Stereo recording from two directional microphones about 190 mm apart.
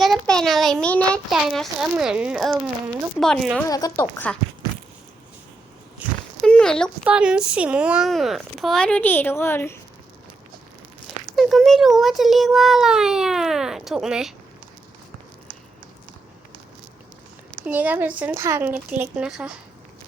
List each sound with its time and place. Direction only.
0.0 s a child's voice: centre (ahead or behind)
3.7 s a woman's voice: 20° left (ahead or behind)
6.0 s a sound: 10° right (ahead or behind)
6.4 s a sound: 5° left (ahead or behind)
7.0 s a child's voice: 5° right (ahead or behind); by 9.7 s 10° left (ahead or behind)
11.3 s a child's voice: centre (ahead or behind)
17.7 s speech: 10° right (ahead or behind)